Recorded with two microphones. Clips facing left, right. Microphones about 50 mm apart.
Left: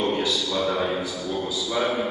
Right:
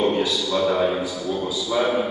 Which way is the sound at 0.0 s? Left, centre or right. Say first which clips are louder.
Right 3 dB; centre.